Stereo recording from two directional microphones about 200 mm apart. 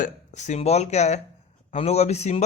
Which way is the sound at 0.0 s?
35° left (ahead or behind).